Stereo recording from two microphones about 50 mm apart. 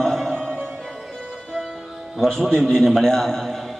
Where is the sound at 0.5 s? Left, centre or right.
Right.